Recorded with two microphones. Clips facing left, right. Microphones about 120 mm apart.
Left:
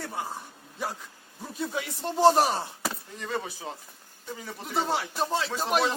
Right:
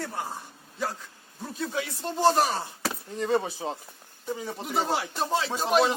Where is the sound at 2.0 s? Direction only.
20° left (ahead or behind).